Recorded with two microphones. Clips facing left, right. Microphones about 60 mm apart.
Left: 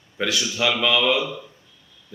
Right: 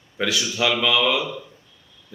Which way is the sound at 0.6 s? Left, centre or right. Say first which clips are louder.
Right 1 dB; centre.